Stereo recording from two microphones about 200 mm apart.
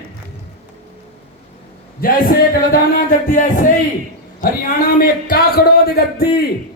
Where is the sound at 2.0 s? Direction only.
45° left (ahead or behind).